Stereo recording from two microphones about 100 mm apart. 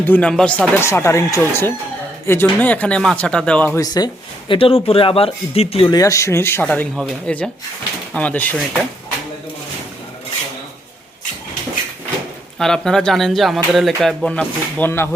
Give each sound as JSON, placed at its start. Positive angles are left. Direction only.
{"t": 0.0, "sound": "speech", "side_deg": 15}
{"t": 0.8, "sound": "speech", "side_deg": 25}
{"t": 3.8, "sound": "speech", "side_deg": 40}
{"t": 4.4, "sound": "speech", "side_deg": 60}
{"t": 5.9, "sound": "speech", "side_deg": 35}
{"t": 6.9, "sound": "speech", "side_deg": 0}
{"t": 7.3, "sound": "speech", "side_deg": 10}
{"t": 12.5, "sound": "speech", "side_deg": 5}
{"t": 14.3, "sound": "speech", "side_deg": 20}